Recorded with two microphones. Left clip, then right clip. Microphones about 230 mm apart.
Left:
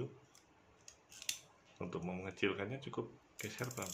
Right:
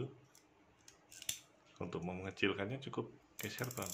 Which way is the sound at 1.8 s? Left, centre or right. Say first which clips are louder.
Even; centre.